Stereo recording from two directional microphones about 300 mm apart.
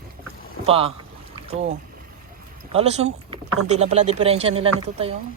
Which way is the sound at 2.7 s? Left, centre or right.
Right.